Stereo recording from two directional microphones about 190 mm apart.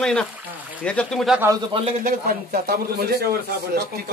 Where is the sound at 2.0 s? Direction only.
50° right (ahead or behind).